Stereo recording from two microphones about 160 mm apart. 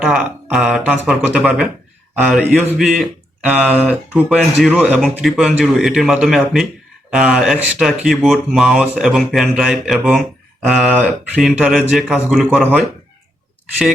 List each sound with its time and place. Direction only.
0.0 s speech: 5° right (ahead or behind)